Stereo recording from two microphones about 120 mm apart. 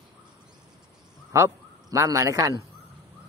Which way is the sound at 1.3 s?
25° right (ahead or behind).